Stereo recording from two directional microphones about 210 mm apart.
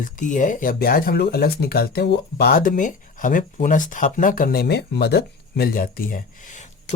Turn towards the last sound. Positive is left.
turn(degrees=40)  # may be behind; listen again after turning